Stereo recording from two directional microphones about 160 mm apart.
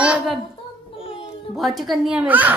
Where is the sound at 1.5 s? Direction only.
Centre (ahead or behind).